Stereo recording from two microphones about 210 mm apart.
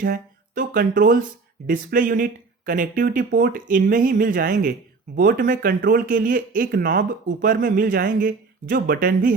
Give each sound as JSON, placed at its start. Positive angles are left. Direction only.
{"t": 0.0, "sound": "speech", "side_deg": -40}